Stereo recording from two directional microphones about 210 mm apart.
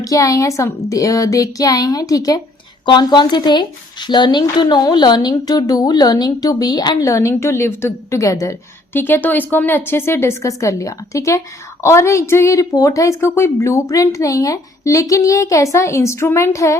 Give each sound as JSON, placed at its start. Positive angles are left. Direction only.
{"t": 0.0, "sound": "speech", "side_deg": 15}